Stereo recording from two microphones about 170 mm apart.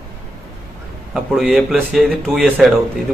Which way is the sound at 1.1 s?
5° right (ahead or behind).